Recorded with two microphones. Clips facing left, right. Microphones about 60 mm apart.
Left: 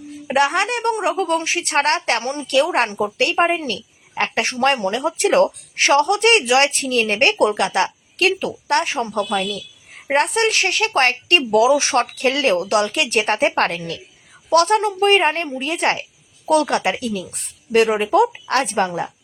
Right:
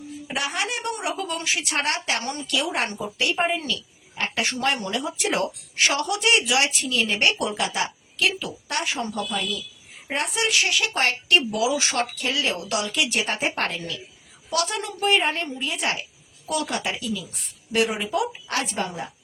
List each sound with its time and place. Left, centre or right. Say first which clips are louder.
0.3 s a woman's voice: left 10 dB; left
2.2 s a woman's voice: left 6 dB; left
3.0 s speech: left 7 dB; left
4.1 s a man's voice: left 6 dB; left
4.4 s a woman's voice: left 8 dB; left
7.5 s a woman's voice: left 7 dB; left
8.9 s a woman's voice: left 6 dB; left
12.5 s speech: left 7 dB; left
14.5 s speech: left 11 dB; left
14.8 s speech: left 7 dB; left